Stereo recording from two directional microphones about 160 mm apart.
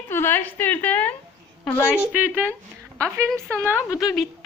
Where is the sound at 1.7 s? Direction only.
10° left (ahead or behind).